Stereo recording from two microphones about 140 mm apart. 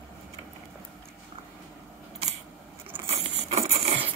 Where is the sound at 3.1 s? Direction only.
45° right (ahead or behind).